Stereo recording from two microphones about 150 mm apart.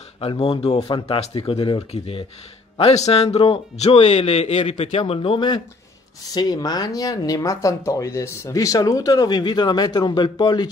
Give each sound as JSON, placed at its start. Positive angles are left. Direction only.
{"t": 0.2, "sound": "a man's voice", "side_deg": 40}